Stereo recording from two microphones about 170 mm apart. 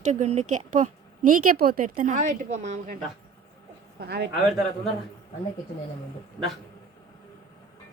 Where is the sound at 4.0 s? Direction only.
80° right.